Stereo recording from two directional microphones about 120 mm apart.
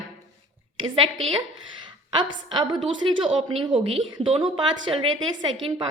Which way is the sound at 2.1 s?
40° right (ahead or behind).